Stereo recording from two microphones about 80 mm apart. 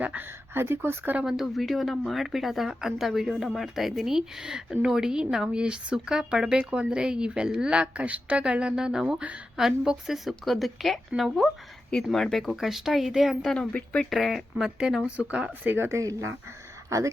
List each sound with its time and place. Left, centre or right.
0.0 s speech: centre
0.3 s speech: right
1.2 s a woman's voice: centre
13.7 s speech: centre
14.1 s speech: centre
15.6 s speech: right
15.9 s a man's voice: right